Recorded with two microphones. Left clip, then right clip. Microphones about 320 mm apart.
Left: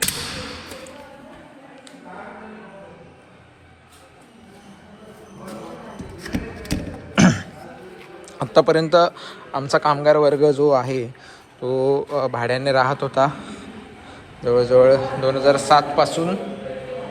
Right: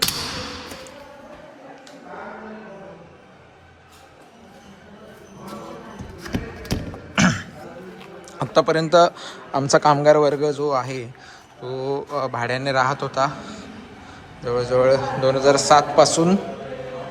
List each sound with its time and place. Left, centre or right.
7.2 s throat clearing: centre
8.4 s a man's voice: centre
13.4 s a sound: right
14.4 s a man's voice: centre